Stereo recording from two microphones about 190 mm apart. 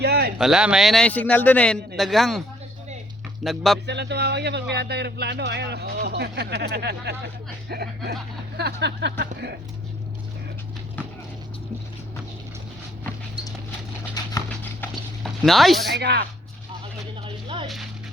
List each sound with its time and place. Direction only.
0.0 s a sound: 60° right (ahead or behind)
0.3 s a man's voice: 5° right (ahead or behind)
3.4 s a man's voice: centre (ahead or behind)
3.8 s speech: 65° right (ahead or behind)
14.3 s clip-clop: 10° left (ahead or behind)
15.2 s speech: centre (ahead or behind)
16.0 s speech: 60° right (ahead or behind)
17.2 s a sound: 25° right (ahead or behind)